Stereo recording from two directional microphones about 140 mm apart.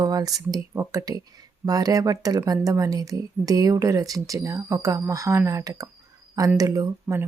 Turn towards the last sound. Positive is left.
turn(degrees=-25)  # may be behind; listen again after turning